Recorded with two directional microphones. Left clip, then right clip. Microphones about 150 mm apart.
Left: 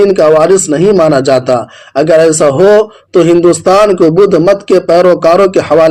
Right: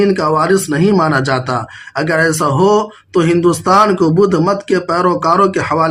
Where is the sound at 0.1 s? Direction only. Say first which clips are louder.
Left 7 dB; 30° left (ahead or behind).